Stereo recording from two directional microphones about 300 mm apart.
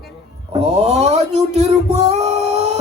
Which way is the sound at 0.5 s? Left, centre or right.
Right.